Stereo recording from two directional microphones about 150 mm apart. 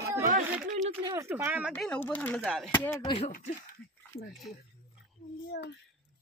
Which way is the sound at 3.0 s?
35° left (ahead or behind).